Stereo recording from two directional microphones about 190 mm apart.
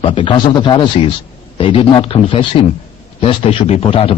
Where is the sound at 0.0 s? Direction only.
30° left (ahead or behind).